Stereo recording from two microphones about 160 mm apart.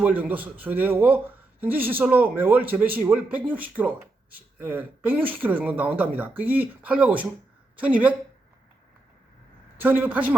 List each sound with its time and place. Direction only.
0.0 s speech: 10° right (ahead or behind)
9.7 s speech: 15° right (ahead or behind)